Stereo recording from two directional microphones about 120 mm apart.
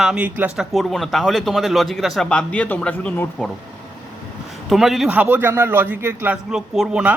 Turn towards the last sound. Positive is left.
turn(degrees=-5)  # may be behind; listen again after turning